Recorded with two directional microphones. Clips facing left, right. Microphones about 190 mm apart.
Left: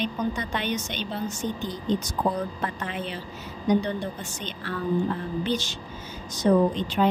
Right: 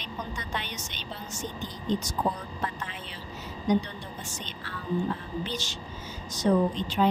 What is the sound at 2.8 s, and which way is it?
Speech, 60° left (ahead or behind).